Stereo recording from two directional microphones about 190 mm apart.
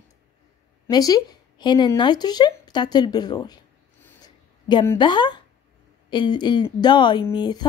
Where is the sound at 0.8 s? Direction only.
20° left (ahead or behind).